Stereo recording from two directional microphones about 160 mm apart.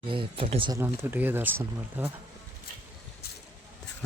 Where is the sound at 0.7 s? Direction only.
15° right (ahead or behind).